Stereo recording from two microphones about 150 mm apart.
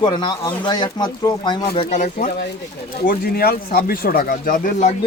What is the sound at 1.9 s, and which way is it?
Speech, 55° left (ahead or behind).